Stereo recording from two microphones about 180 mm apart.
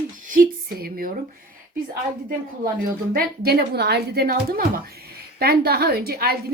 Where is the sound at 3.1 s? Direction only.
60° right (ahead or behind).